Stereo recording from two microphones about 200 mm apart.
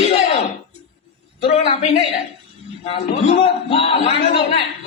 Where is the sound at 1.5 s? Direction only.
35° left (ahead or behind).